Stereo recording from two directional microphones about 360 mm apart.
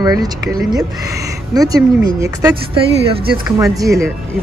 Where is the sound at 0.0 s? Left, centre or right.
Centre.